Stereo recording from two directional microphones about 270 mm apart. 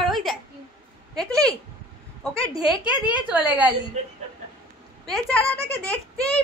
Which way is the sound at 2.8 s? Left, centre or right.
Centre.